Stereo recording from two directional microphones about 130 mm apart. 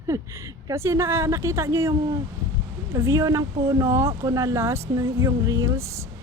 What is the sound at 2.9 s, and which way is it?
Speech, 25° right (ahead or behind).